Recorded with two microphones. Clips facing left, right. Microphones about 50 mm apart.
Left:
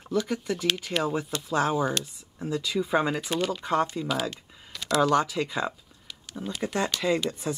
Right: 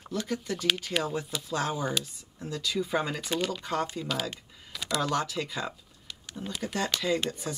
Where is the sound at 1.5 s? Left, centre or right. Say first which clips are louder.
Left 5 dB; centre.